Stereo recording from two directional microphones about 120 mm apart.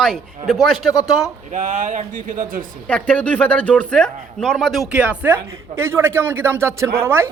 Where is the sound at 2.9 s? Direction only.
10° left (ahead or behind).